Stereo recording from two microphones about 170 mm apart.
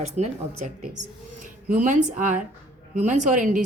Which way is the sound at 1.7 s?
50° right (ahead or behind).